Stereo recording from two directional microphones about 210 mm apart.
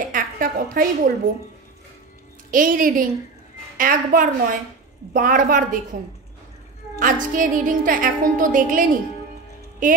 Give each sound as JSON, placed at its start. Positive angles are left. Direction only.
{"t": 0.1, "sound": "a woman's voice", "side_deg": -40}
{"t": 2.5, "sound": "a woman's voice", "side_deg": -40}
{"t": 7.0, "sound": "a woman's voice", "side_deg": -40}